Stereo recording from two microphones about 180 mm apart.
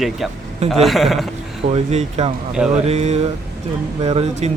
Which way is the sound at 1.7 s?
40° right (ahead or behind).